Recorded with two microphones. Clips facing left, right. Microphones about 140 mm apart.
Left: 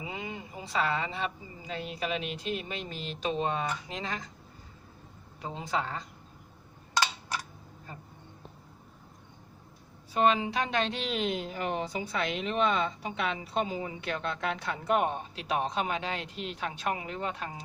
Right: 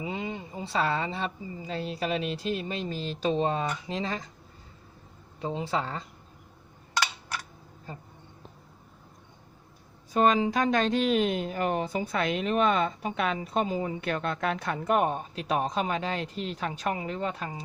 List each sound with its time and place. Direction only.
0.0 s a woman's voice: 25° right (ahead or behind)
5.4 s speech: 30° right (ahead or behind)
10.1 s speech: 40° right (ahead or behind)